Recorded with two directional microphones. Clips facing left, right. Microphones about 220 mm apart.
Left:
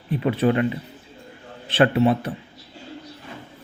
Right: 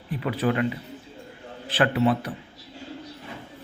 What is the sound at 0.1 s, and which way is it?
Speech, 25° left (ahead or behind).